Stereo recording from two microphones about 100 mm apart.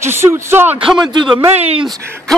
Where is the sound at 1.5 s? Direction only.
90° right.